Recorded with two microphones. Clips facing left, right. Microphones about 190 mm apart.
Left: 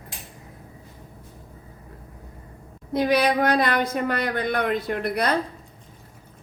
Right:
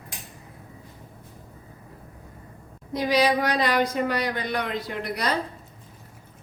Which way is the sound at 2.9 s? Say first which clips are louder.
Left 2 dB; 55° left (ahead or behind).